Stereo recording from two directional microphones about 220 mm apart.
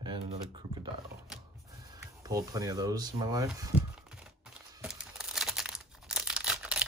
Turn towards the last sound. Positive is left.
turn(degrees=-5)  # may be behind; listen again after turning